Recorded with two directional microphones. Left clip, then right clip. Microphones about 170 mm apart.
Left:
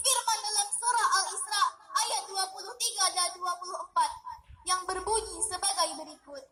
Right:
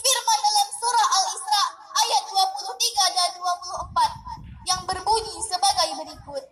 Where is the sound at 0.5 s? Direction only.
35° right (ahead or behind).